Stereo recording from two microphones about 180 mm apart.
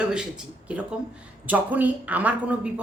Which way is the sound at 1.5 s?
10° right (ahead or behind).